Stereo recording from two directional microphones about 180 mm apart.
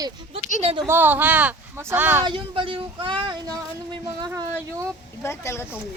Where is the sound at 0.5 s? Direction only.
35° right (ahead or behind).